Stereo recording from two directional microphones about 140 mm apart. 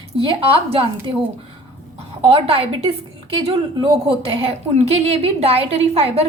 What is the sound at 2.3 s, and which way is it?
Speech, 45° right (ahead or behind).